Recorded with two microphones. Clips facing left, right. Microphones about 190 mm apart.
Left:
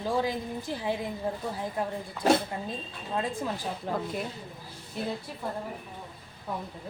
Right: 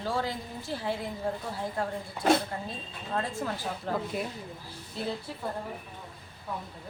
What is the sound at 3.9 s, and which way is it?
Speech, 15° left (ahead or behind).